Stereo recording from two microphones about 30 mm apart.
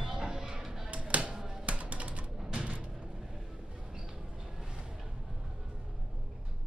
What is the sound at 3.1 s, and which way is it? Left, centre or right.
Vehicle, centre.